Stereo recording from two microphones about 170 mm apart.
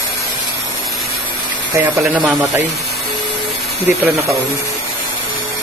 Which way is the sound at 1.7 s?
15° right (ahead or behind).